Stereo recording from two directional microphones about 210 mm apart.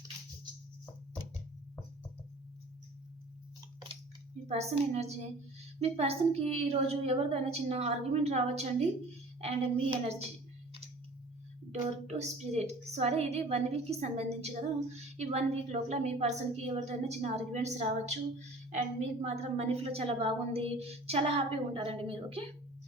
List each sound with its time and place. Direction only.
4.4 s a woman's voice: 30° right (ahead or behind)
11.7 s a woman's voice: 35° right (ahead or behind)